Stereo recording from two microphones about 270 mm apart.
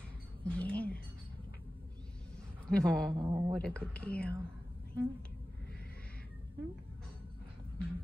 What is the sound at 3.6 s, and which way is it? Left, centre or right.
Speech, centre.